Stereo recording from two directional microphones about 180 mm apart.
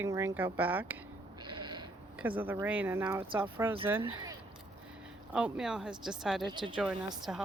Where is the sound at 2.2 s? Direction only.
10° right (ahead or behind).